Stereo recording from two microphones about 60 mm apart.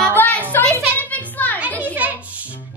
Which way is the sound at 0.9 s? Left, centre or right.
Left.